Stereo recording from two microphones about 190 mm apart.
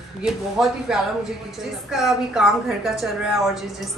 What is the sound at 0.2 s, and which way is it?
A woman's voice, centre (ahead or behind).